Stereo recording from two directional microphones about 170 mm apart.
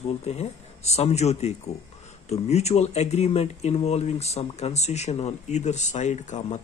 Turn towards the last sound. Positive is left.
turn(degrees=45)  # may be behind; listen again after turning